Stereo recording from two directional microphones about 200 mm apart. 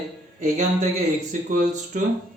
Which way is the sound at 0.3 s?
40° right (ahead or behind).